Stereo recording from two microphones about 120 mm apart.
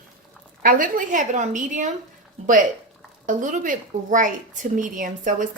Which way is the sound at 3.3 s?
90° right.